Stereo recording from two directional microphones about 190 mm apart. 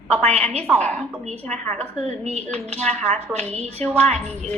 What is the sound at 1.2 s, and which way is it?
A woman's voice, 35° right (ahead or behind).